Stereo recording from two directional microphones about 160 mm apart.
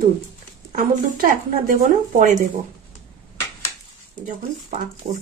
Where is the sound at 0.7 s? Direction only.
60° right (ahead or behind).